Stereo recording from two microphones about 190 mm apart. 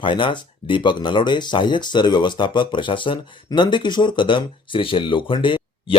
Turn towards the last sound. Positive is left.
turn(degrees=25)  # may be behind; listen again after turning